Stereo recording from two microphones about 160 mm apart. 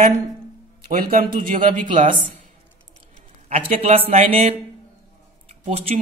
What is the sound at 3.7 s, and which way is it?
Speech, 40° right (ahead or behind).